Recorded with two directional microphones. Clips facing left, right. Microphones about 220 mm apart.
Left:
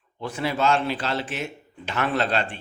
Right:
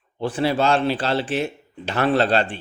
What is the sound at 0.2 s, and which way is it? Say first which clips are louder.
A man's voice: right 5 dB; 30° right (ahead or behind).